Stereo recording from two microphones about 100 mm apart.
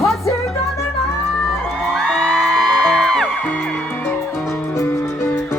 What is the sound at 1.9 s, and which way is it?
Music, 10° left (ahead or behind).